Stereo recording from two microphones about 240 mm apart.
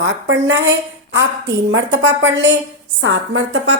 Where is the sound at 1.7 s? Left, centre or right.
Right.